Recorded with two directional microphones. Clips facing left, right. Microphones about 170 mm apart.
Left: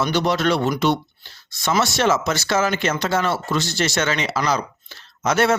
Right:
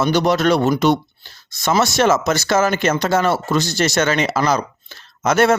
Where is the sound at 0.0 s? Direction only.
45° right (ahead or behind).